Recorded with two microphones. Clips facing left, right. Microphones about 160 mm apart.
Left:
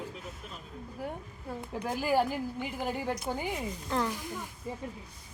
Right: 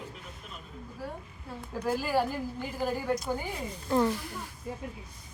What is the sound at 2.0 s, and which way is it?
Speech, 15° left (ahead or behind).